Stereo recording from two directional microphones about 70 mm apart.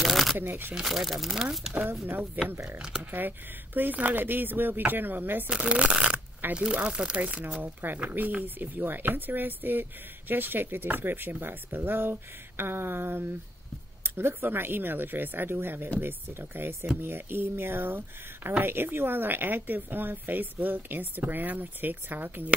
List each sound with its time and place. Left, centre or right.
0.0 s shuffling cards: centre
0.4 s speech: right
0.7 s speech: centre
1.7 s speech: right
2.5 s speech: right
2.8 s speech: centre
3.1 s speech: right
5.5 s speech: centre